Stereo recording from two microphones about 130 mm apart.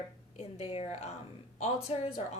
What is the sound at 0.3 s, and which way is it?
A woman's voice, 50° left (ahead or behind).